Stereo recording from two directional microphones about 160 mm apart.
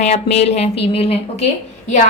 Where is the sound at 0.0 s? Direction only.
40° left (ahead or behind).